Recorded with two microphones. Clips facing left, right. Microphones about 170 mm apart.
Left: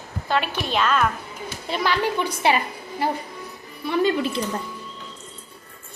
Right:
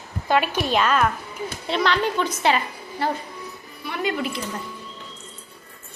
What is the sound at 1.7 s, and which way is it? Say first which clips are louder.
A woman's voice: right 1 dB; 10° left (ahead or behind).